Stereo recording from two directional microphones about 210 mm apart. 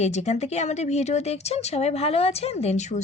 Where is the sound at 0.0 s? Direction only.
30° left (ahead or behind).